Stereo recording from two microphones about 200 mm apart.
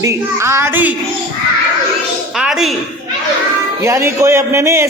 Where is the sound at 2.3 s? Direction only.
Centre (ahead or behind).